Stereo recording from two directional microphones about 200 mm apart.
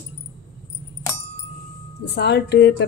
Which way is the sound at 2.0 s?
55° left (ahead or behind).